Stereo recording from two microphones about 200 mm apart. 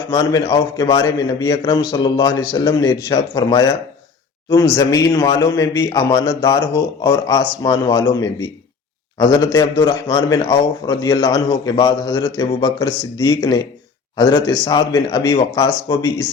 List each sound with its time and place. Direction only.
0.1 s a man's voice: 15° left (ahead or behind)